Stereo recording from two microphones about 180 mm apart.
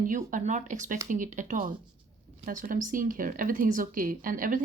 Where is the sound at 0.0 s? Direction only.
45° right (ahead or behind).